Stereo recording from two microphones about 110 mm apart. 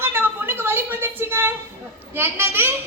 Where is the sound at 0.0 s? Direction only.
20° right (ahead or behind).